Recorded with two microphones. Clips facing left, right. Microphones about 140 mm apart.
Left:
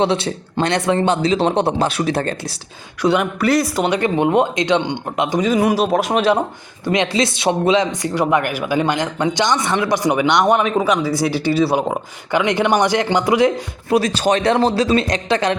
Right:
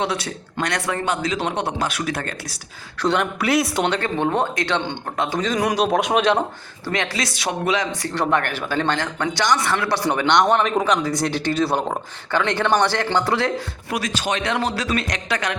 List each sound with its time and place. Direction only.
0.0 s speech: 30° left (ahead or behind)
3.0 s speech: 5° left (ahead or behind)
3.8 s speech: 15° left (ahead or behind)
6.8 s speech: 20° left (ahead or behind)
8.1 s speech: 10° left (ahead or behind)
13.9 s speech: 35° left (ahead or behind)